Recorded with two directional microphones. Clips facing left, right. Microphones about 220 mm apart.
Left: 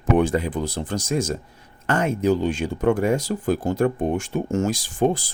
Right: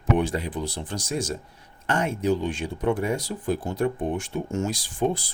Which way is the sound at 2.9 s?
90° left.